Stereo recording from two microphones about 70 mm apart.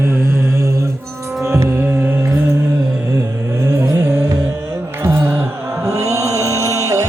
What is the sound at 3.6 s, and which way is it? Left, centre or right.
Music, right.